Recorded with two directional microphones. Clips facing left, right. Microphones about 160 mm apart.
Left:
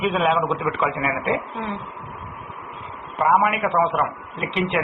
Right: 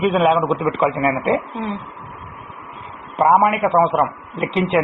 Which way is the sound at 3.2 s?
25° right (ahead or behind).